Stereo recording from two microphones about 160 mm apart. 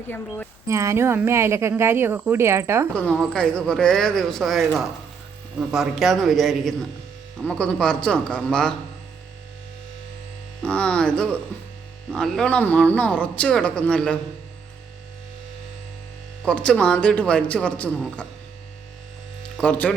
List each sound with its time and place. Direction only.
0.7 s speech: 20° right (ahead or behind)
2.9 s speech: 5° left (ahead or behind)
10.6 s speech: 5° left (ahead or behind)
16.4 s speech: 5° left (ahead or behind)
19.5 s speech: 10° left (ahead or behind)